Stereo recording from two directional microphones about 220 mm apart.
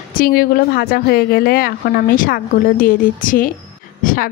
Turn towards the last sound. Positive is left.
turn(degrees=40)  # may be behind; listen again after turning